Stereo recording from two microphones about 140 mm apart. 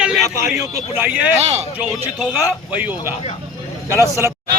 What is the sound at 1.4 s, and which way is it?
Speech, 50° right (ahead or behind).